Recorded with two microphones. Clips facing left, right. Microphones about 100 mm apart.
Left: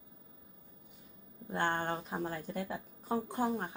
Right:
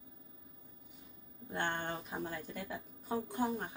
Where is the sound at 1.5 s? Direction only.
40° left (ahead or behind).